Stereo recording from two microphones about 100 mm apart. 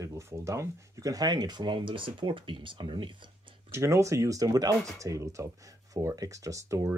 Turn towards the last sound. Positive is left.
turn(degrees=-30)  # may be behind; listen again after turning